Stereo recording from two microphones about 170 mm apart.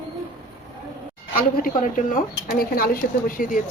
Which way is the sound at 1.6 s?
55° left (ahead or behind).